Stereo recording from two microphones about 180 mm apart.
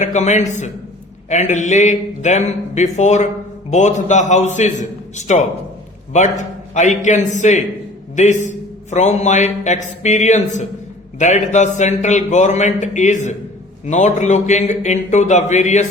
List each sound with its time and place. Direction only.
0.0 s a man's voice: 40° left (ahead or behind)